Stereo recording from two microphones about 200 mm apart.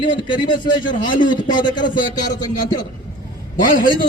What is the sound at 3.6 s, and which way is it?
Speech, 45° left (ahead or behind).